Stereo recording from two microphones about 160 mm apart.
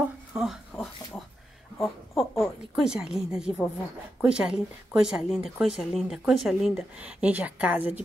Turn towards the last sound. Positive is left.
turn(degrees=-10)  # may be behind; listen again after turning